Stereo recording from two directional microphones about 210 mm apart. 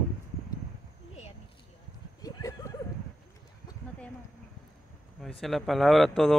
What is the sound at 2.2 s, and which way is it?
Horse, 20° left (ahead or behind).